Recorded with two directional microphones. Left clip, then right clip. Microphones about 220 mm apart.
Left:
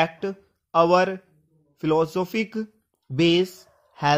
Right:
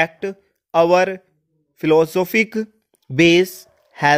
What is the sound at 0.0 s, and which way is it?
Speech, 45° right (ahead or behind).